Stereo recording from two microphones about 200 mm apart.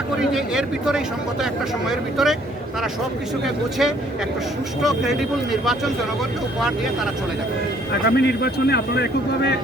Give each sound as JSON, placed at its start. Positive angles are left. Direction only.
{"t": 0.2, "sound": "speech", "side_deg": 0}
{"t": 3.4, "sound": "speech", "side_deg": 0}
{"t": 8.0, "sound": "speech", "side_deg": 55}